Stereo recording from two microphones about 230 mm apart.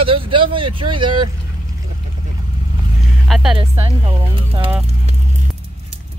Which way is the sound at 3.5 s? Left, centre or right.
Right.